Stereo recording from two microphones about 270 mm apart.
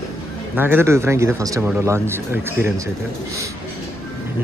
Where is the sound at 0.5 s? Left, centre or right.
Centre.